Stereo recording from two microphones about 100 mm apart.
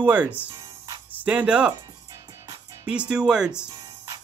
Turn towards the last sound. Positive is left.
turn(degrees=-10)  # may be behind; listen again after turning